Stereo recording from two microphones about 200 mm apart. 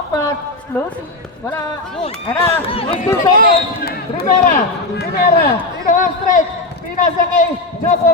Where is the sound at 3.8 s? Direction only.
50° left (ahead or behind).